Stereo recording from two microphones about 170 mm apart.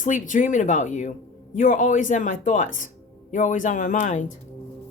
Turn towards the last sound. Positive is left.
turn(degrees=50)  # may be behind; listen again after turning